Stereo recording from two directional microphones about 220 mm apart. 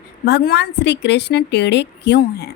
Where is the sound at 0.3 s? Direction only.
50° left (ahead or behind).